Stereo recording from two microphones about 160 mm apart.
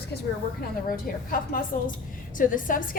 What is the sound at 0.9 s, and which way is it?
A woman's voice, 60° left (ahead or behind).